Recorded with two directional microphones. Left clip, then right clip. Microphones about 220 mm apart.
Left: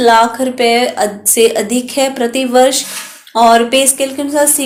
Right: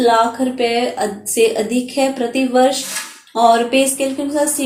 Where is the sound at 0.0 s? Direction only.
25° left (ahead or behind).